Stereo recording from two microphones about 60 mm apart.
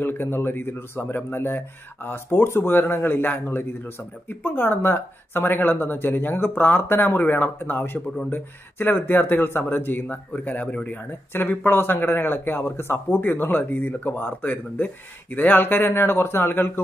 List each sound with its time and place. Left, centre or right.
0.0 s a man's voice: left